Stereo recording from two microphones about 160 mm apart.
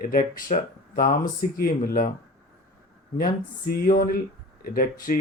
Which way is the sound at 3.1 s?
65° left (ahead or behind).